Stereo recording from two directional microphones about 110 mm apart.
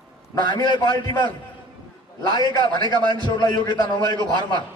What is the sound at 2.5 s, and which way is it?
Speech, 40° left (ahead or behind).